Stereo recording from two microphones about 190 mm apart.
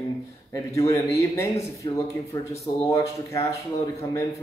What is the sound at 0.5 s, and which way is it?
Speech, 15° left (ahead or behind).